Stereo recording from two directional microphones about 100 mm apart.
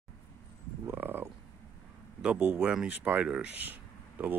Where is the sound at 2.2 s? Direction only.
20° right (ahead or behind).